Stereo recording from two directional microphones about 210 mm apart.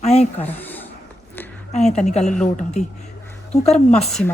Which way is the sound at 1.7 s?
35° left (ahead or behind).